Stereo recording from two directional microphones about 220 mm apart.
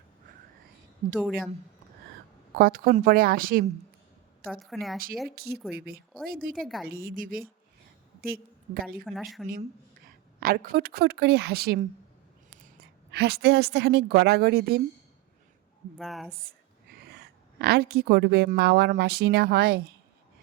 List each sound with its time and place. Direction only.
1.2 s speech: centre (ahead or behind)
2.6 s speech: 40° right (ahead or behind)
4.6 s speech: centre (ahead or behind)
5.3 s a woman's voice: 45° right (ahead or behind)
9.0 s speech: centre (ahead or behind)
10.4 s a woman's voice: 40° right (ahead or behind)
12.8 s a woman's voice: 50° right (ahead or behind)
16.0 s speech: centre (ahead or behind)
16.3 s a woman's voice: 40° right (ahead or behind)